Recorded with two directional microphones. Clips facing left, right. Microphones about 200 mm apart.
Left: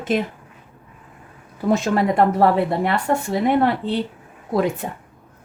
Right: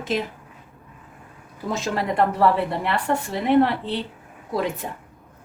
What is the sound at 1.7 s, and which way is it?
Speech, 50° left (ahead or behind).